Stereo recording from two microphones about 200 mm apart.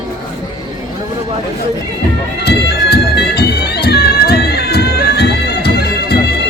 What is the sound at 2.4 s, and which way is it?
Bagpipes, 55° left (ahead or behind).